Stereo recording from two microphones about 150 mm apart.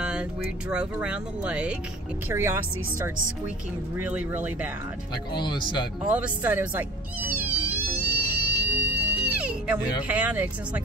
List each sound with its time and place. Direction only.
0.0 s speech: 5° right (ahead or behind)
3.9 s speech: 10° right (ahead or behind)
5.3 s speech: 30° left (ahead or behind)
6.1 s music: 10° right (ahead or behind)